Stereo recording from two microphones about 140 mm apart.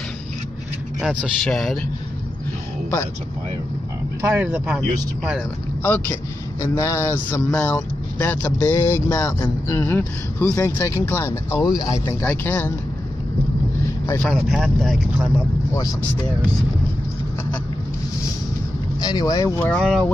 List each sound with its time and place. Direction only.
1.0 s speech: centre (ahead or behind)
4.3 s speech: 10° right (ahead or behind)
5.8 s speech: 15° left (ahead or behind)
8.5 s speech: 25° left (ahead or behind)
11.6 s speech: 30° left (ahead or behind)
12.2 s speech: 15° left (ahead or behind)
13.8 s vehicle: 20° left (ahead or behind)
14.2 s speech: centre (ahead or behind)
19.0 s speech: 25° left (ahead or behind)
19.7 s speech: 5° left (ahead or behind)